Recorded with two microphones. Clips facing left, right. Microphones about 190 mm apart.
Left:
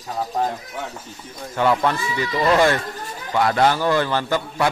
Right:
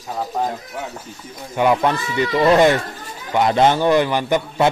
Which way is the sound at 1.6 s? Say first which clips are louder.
Right 2 dB; 15° right (ahead or behind).